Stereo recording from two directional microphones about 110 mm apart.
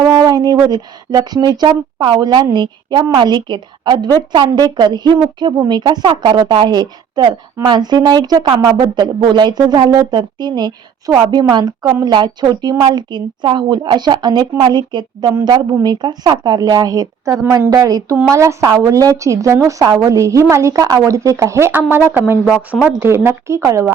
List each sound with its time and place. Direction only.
0.1 s a woman's voice: 40° right (ahead or behind)